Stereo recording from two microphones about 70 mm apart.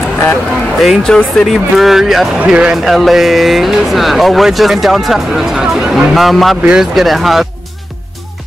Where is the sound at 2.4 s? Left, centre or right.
Centre.